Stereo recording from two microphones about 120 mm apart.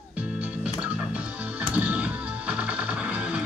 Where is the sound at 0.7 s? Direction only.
10° right (ahead or behind).